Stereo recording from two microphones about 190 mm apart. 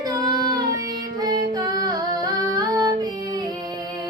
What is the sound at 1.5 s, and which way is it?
Female singing, 20° right (ahead or behind).